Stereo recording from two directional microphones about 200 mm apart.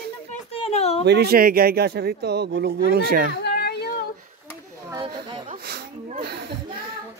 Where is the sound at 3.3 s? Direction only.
55° left (ahead or behind).